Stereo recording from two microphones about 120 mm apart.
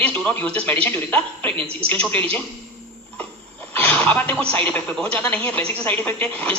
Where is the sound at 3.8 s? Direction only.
10° left (ahead or behind).